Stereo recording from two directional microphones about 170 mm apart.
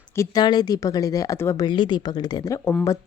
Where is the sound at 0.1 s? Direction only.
20° left (ahead or behind).